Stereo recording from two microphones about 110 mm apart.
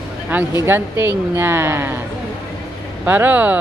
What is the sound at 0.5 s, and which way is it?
Speech, 25° right (ahead or behind).